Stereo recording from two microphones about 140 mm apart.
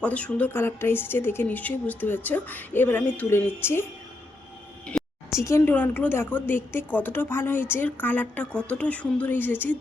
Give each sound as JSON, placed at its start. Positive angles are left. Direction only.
{"t": 0.0, "sound": "a woman's voice", "side_deg": 10}
{"t": 4.9, "sound": "a sound", "side_deg": 5}
{"t": 5.4, "sound": "a woman's voice", "side_deg": 20}